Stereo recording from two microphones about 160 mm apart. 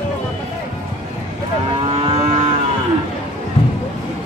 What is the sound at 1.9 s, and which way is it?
Vehicle, 35° right (ahead or behind).